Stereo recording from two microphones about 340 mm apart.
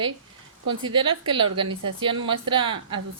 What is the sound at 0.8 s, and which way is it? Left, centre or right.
Speech, centre.